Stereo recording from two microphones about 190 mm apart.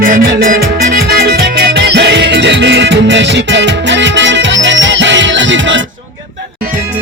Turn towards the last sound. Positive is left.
turn(degrees=-75)  # may be behind; listen again after turning